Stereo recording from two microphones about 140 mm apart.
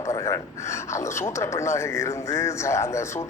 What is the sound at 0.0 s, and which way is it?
Speech, 25° left (ahead or behind).